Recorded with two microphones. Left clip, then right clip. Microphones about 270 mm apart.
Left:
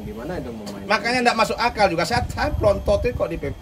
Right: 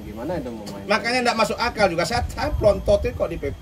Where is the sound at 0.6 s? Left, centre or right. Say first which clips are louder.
Left 1 dB; centre.